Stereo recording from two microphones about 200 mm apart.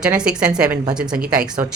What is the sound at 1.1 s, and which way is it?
Speech, 45° right (ahead or behind).